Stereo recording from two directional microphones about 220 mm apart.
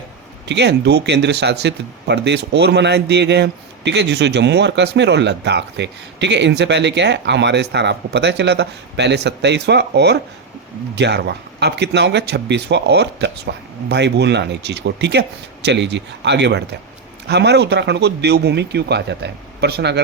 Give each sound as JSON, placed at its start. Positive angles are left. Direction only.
{"t": 0.4, "sound": "speech", "side_deg": -50}